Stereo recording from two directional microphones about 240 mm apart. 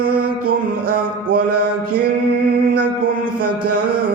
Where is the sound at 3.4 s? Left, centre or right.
Right.